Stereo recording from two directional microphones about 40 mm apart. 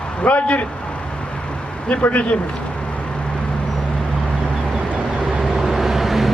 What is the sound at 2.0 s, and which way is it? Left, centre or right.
Speech, left.